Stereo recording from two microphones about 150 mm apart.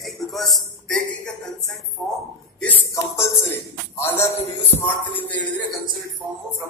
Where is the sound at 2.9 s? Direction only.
15° left (ahead or behind).